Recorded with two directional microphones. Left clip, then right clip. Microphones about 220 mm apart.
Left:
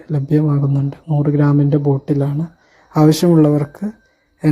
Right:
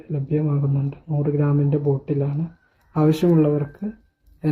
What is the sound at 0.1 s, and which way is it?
Speech, 35° left (ahead or behind).